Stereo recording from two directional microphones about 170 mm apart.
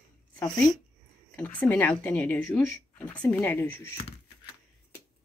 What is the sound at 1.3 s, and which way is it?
Speech, 10° left (ahead or behind).